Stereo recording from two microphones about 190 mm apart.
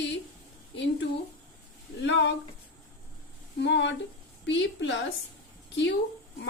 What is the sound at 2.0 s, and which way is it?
Speech, 70° left (ahead or behind).